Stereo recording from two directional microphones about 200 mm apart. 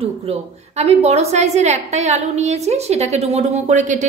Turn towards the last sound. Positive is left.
turn(degrees=-40)  # may be behind; listen again after turning